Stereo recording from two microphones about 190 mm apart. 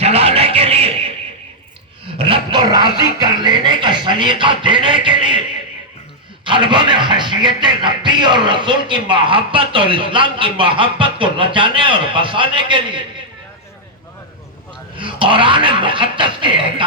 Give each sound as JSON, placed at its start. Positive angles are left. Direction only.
{"t": 0.0, "sound": "music", "side_deg": -30}
{"t": 2.1, "sound": "dog", "side_deg": -30}
{"t": 3.2, "sound": "speech", "side_deg": -25}
{"t": 6.4, "sound": "speech", "side_deg": -25}
{"t": 14.9, "sound": "speech", "side_deg": -25}